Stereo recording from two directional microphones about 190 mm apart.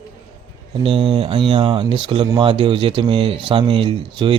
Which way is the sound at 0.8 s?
30° right (ahead or behind).